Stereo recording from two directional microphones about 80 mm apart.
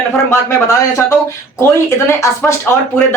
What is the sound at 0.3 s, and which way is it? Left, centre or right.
Speech, left.